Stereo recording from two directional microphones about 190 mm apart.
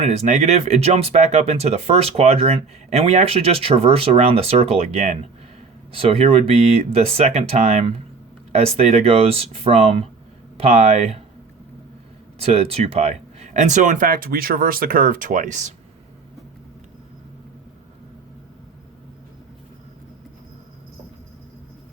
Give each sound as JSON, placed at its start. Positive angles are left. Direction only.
{"t": 0.0, "sound": "speech", "side_deg": -35}
{"t": 12.4, "sound": "speech", "side_deg": -30}